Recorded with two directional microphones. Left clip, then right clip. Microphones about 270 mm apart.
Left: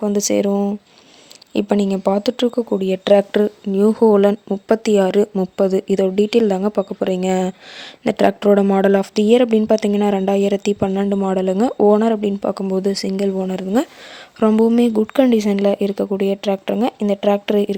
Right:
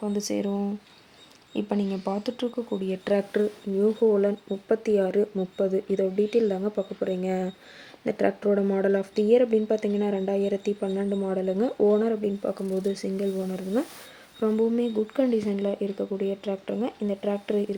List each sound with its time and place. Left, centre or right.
0.0 s speech: left